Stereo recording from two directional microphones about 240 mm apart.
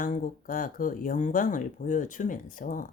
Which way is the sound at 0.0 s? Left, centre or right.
Left.